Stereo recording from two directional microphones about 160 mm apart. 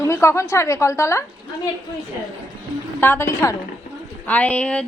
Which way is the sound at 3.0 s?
15° left (ahead or behind).